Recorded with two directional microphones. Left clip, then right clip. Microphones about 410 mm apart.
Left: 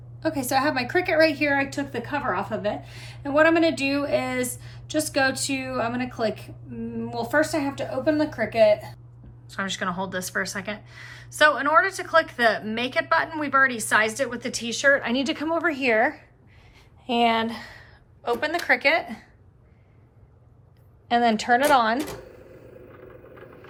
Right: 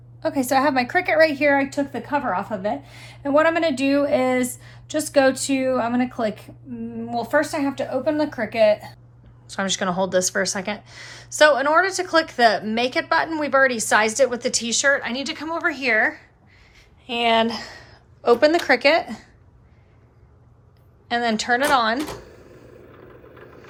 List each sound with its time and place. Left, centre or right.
0.2 s a woman's voice: centre
9.5 s a woman's voice: centre
21.1 s speech: centre